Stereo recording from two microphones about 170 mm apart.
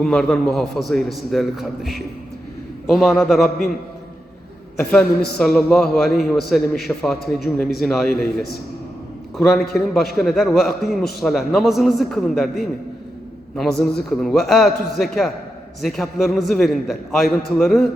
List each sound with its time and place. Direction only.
0.0 s a man's voice: 5° left (ahead or behind)
4.8 s a man's voice: 5° left (ahead or behind)
9.5 s a man's voice: centre (ahead or behind)